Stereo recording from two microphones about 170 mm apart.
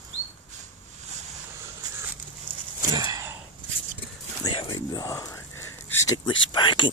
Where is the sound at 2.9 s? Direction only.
20° right (ahead or behind).